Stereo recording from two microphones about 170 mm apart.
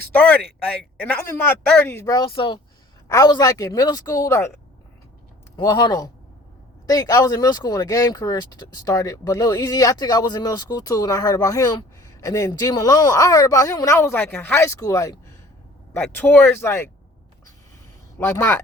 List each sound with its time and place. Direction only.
0.1 s speech: 10° left (ahead or behind)
5.5 s speech: 25° left (ahead or behind)
18.2 s speech: 15° left (ahead or behind)